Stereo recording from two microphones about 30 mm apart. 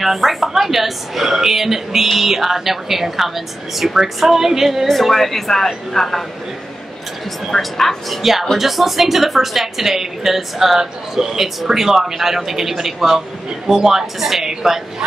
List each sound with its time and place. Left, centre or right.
0.0 s a woman's voice: centre
4.8 s a woman's voice: centre
7.5 s a woman's voice: centre
8.2 s a woman's voice: centre